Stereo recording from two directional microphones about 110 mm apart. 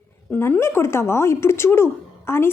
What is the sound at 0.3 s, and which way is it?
A woman's voice, 20° left (ahead or behind).